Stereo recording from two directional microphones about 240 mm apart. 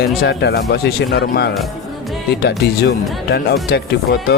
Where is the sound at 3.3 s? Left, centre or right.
Left.